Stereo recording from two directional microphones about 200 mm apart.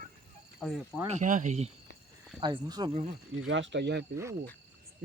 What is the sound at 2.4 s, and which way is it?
Speech, 20° right (ahead or behind).